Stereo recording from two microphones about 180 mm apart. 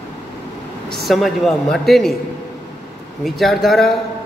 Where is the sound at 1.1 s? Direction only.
Centre (ahead or behind).